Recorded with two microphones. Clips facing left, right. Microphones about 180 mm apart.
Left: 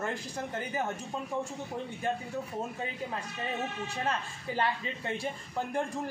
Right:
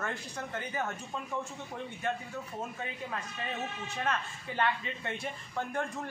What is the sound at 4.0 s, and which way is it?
Speech, 30° left (ahead or behind).